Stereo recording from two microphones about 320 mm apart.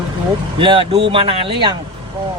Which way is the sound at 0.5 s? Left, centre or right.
Centre.